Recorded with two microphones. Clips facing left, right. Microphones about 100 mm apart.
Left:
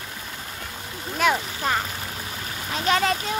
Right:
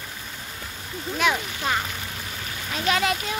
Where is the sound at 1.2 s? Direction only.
40° left (ahead or behind).